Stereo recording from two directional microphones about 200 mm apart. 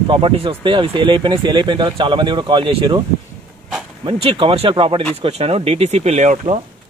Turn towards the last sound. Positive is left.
turn(degrees=-30)  # may be behind; listen again after turning